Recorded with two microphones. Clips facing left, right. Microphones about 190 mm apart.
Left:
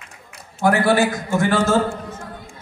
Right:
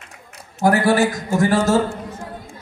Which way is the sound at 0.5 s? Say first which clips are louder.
Right 1 dB; 40° right (ahead or behind).